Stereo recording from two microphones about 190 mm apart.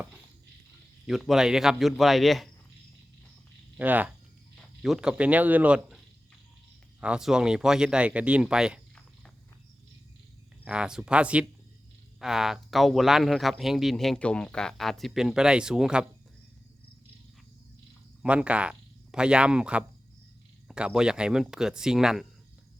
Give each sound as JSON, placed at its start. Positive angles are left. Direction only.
{"t": 1.0, "sound": "speech", "side_deg": 0}
{"t": 3.8, "sound": "speech", "side_deg": -10}
{"t": 7.0, "sound": "speech", "side_deg": -5}
{"t": 10.7, "sound": "speech", "side_deg": -5}
{"t": 18.2, "sound": "speech", "side_deg": -5}